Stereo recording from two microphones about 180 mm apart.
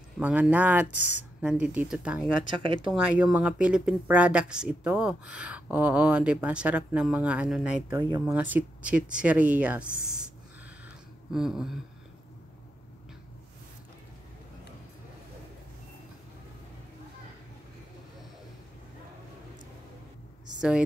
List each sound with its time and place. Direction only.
0.2 s speech: 10° right (ahead or behind)
2.5 s speech: 30° right (ahead or behind)
2.9 s speech: 5° right (ahead or behind)
7.9 s speech: 25° right (ahead or behind)
8.3 s speech: 10° right (ahead or behind)
11.3 s a sound: 5° right (ahead or behind)